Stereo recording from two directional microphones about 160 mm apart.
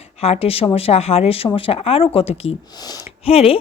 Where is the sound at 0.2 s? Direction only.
40° left (ahead or behind).